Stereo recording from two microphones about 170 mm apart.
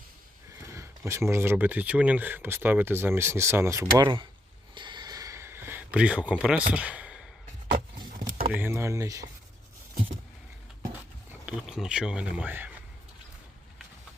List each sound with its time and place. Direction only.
0.7 s speech: 15° right (ahead or behind)
3.9 s speech: 30° right (ahead or behind)
4.7 s a sound: 25° right (ahead or behind); by 7.3 s 5° right (ahead or behind)
8.5 s speech: 15° right (ahead or behind)
11.3 s speech: 5° right (ahead or behind)